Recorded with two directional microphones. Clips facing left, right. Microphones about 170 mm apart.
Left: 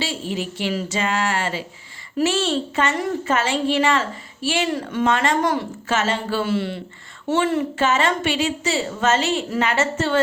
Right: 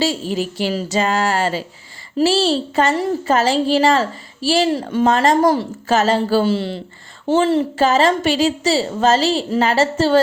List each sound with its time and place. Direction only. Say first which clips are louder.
0.0 s a woman's voice: right 6 dB; 40° right (ahead or behind)